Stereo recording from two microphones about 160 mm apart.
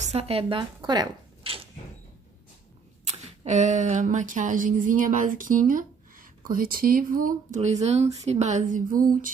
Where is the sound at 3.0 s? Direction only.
45° right (ahead or behind).